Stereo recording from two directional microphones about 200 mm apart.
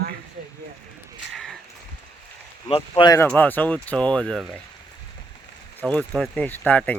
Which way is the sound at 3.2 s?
10° left (ahead or behind).